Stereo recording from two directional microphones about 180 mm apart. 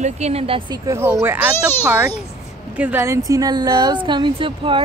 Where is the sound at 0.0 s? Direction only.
35° right (ahead or behind).